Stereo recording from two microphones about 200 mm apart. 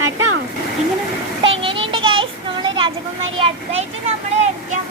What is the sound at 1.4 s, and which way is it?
Child singing, 25° right (ahead or behind).